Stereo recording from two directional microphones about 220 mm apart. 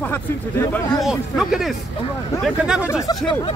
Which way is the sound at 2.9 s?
20° left (ahead or behind).